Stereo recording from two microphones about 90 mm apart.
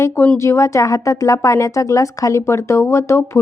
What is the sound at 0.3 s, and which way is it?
A woman's voice, 35° left (ahead or behind).